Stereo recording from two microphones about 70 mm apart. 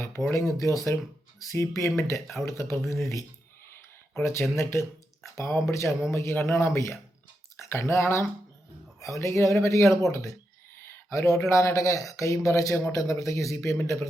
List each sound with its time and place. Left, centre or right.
0.0 s speech: left